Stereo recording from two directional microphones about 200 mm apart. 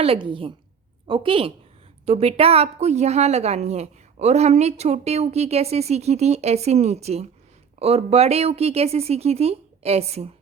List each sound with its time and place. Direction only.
0.0 s a woman's voice: 25° right (ahead or behind)